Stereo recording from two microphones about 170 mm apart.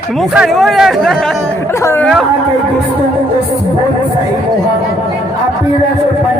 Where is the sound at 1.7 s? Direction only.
15° left (ahead or behind).